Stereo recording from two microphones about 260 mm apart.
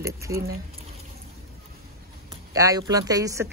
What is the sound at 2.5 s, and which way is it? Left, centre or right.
Speech, centre.